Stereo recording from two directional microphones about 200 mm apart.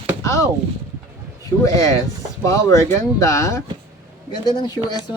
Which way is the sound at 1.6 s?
15° left (ahead or behind).